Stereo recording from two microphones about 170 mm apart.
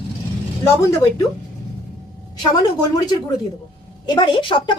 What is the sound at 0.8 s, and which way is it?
Speech, 20° left (ahead or behind).